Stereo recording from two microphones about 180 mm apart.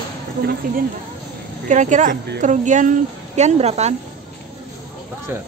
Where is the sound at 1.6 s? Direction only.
40° right (ahead or behind).